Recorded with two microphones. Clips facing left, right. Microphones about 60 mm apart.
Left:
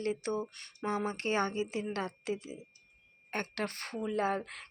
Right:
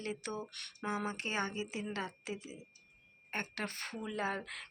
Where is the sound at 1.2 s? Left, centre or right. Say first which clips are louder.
Left 6 dB; left.